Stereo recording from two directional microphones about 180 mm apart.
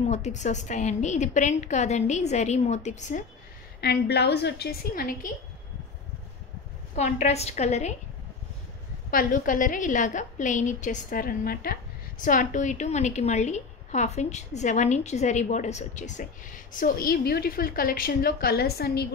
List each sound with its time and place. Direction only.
0.1 s a woman's voice: 40° left (ahead or behind)
3.8 s a woman's voice: 65° left (ahead or behind)
7.0 s a woman's voice: 40° left (ahead or behind)
9.1 s a woman's voice: 50° left (ahead or behind)